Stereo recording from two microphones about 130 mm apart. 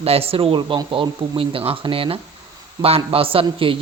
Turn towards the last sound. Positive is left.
turn(degrees=-45)  # may be behind; listen again after turning